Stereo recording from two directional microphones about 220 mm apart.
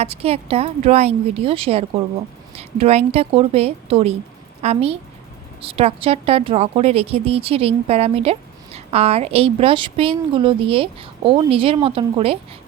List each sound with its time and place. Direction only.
0.0 s speech: 30° right (ahead or behind)